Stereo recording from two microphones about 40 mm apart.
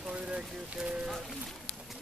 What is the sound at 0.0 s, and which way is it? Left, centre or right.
Boat, right.